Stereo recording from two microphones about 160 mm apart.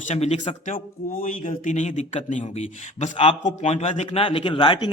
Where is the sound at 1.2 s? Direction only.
55° left (ahead or behind).